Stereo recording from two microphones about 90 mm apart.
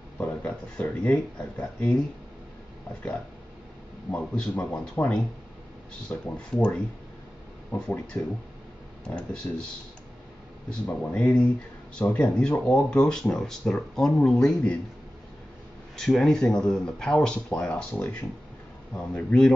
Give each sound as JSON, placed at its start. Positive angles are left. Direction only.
{"t": 0.2, "sound": "speech", "side_deg": 20}
{"t": 4.1, "sound": "speech", "side_deg": 15}
{"t": 9.0, "sound": "speech", "side_deg": 10}
{"t": 10.7, "sound": "speech", "side_deg": 15}
{"t": 16.0, "sound": "speech", "side_deg": 5}